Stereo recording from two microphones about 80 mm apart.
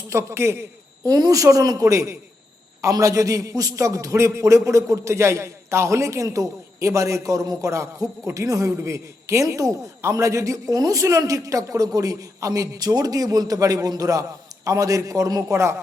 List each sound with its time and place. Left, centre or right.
0.1 s a man's voice: right
1.0 s a man's voice: right